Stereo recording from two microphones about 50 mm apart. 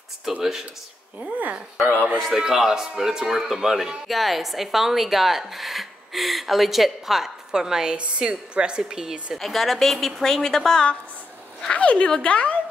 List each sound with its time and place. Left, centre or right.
0.3 s a woman's voice: centre
1.2 s speech: right
2.3 s a woman's voice: centre
9.4 s speech: centre
11.6 s speech: left